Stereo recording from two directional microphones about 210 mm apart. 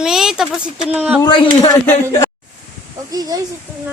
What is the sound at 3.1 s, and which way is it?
Speech, 20° right (ahead or behind).